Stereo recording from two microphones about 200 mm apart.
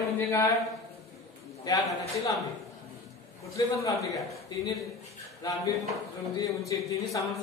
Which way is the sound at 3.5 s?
15° left (ahead or behind).